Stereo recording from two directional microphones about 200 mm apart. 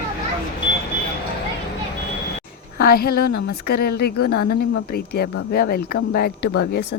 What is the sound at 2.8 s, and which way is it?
A woman's voice, 50° left (ahead or behind).